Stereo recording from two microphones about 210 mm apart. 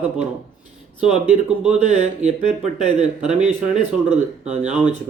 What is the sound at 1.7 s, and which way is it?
Speech, 30° right (ahead or behind).